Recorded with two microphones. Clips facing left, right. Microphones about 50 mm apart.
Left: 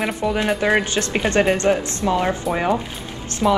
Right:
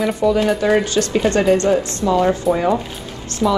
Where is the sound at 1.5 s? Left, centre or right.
Left.